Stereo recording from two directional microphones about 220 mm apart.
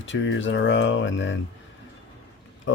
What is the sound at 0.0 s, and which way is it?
Speech, 55° left (ahead or behind).